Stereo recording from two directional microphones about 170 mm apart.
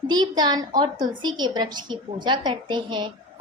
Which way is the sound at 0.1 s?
25° right (ahead or behind).